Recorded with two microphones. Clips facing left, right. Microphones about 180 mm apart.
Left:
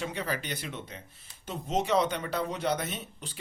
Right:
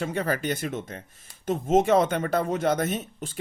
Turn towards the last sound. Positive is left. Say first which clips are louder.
# right 9 dB
turn(degrees=-45)  # may be behind; listen again after turning